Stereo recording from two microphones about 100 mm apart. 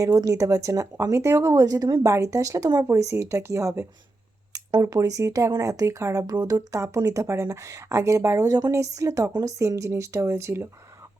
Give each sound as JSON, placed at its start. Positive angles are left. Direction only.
{"t": 0.0, "sound": "speech", "side_deg": -35}
{"t": 2.8, "sound": "speech", "side_deg": -30}